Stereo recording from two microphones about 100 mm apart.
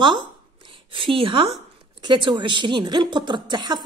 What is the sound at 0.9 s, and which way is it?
Speech, 60° right (ahead or behind).